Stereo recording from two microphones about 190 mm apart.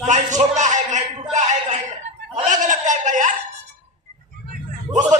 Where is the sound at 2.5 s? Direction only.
40° right (ahead or behind).